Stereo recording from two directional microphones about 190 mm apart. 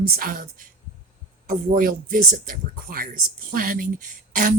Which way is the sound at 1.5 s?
45° right (ahead or behind).